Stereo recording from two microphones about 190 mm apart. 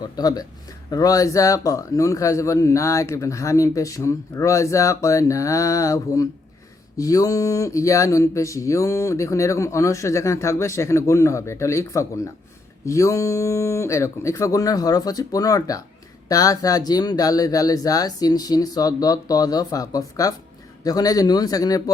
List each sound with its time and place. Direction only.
0.2 s a man's voice: 20° left (ahead or behind)